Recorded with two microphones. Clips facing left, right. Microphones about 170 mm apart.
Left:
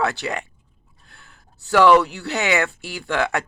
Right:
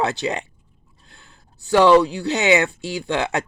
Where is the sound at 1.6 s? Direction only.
15° right (ahead or behind).